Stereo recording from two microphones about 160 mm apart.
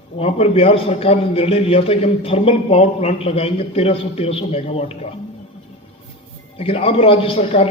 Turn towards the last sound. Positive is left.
turn(degrees=35)  # may be behind; listen again after turning